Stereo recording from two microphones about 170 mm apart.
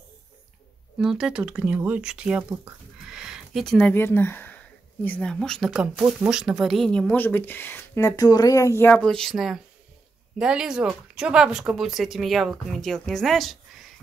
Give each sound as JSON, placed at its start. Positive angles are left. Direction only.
{"t": 0.9, "sound": "speech", "side_deg": -5}